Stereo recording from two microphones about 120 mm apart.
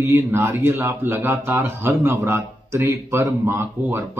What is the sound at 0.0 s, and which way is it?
A man's voice, 20° right (ahead or behind).